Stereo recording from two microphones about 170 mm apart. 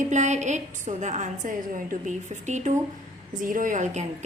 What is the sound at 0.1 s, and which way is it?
A woman's voice, 45° right (ahead or behind).